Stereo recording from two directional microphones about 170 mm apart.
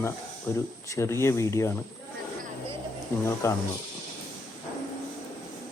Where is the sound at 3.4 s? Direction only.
15° left (ahead or behind).